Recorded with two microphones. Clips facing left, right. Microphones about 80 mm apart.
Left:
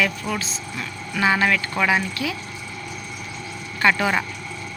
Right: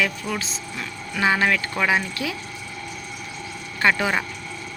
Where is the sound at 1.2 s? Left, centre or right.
Right.